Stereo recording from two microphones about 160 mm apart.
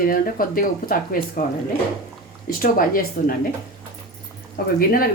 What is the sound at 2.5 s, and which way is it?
Speech, 60° left (ahead or behind).